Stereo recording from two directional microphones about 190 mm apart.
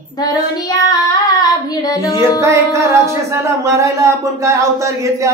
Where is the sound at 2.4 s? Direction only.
15° right (ahead or behind).